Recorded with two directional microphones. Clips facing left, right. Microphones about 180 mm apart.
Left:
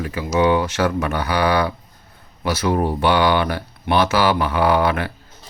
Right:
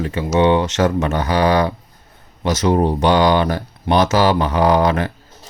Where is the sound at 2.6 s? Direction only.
20° right (ahead or behind).